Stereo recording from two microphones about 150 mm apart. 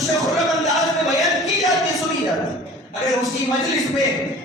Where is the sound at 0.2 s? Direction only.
Centre (ahead or behind).